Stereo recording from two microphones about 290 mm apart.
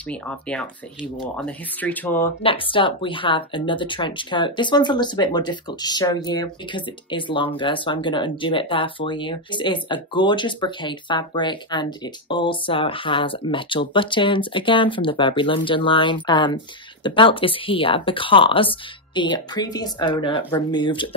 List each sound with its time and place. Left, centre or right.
0.1 s speech: centre
2.4 s speech: centre